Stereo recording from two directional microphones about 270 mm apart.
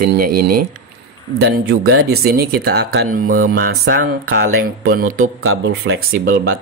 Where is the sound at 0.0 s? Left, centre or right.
Right.